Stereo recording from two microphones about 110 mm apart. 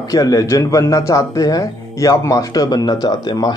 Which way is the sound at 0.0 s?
30° left (ahead or behind).